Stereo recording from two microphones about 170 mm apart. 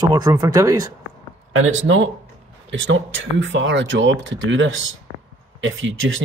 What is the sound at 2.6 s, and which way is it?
Speech, 90° right.